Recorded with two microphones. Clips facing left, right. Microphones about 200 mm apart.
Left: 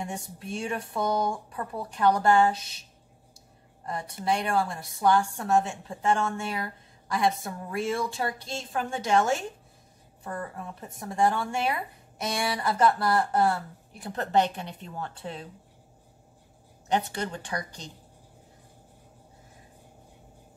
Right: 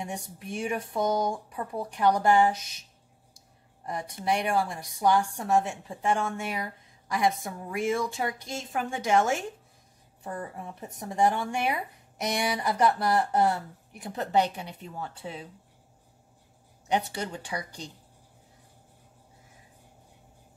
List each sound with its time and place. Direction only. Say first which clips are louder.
0.0 s a woman's voice: left 1 dB; 15° right (ahead or behind)
3.8 s a woman's voice: even; 15° right (ahead or behind)
16.8 s a woman's voice: left 1 dB; 10° right (ahead or behind)